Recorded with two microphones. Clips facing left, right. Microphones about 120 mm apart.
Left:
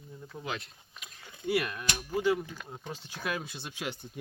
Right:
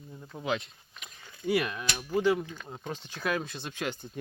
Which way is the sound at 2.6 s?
10° right (ahead or behind).